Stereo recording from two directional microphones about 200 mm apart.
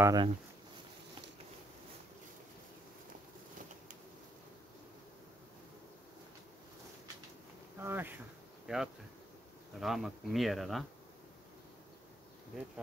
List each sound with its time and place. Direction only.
0.0 s speech: 20° right (ahead or behind)
7.8 s bee: 10° right (ahead or behind)
9.8 s speech: centre (ahead or behind)